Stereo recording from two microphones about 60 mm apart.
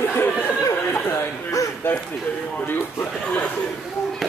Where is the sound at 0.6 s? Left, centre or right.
Left.